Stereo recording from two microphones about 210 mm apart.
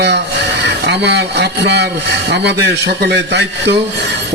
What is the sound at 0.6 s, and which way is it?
A man's voice, 55° right (ahead or behind).